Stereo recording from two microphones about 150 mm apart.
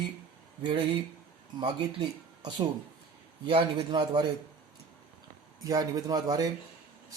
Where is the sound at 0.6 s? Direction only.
35° right (ahead or behind).